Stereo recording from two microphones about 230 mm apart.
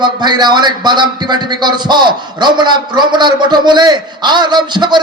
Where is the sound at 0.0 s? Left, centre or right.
Centre.